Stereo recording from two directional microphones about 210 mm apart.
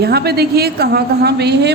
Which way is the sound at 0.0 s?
50° right (ahead or behind).